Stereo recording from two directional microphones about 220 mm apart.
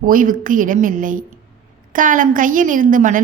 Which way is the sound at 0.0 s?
40° right (ahead or behind).